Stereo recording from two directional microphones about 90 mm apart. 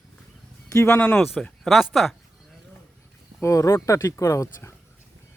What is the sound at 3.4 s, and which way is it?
Speech, 35° left (ahead or behind).